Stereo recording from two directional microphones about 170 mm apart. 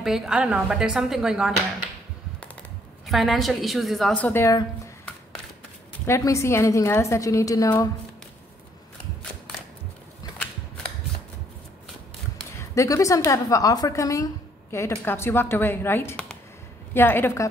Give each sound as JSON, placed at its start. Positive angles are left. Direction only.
{"t": 0.0, "sound": "a woman's voice", "side_deg": -5}
{"t": 3.1, "sound": "a woman's voice", "side_deg": 0}
{"t": 6.0, "sound": "a woman's voice", "side_deg": 15}
{"t": 12.5, "sound": "a woman's voice", "side_deg": 20}